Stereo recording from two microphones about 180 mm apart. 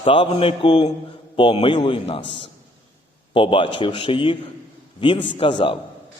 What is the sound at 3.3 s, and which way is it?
A man's voice, 30° left (ahead or behind).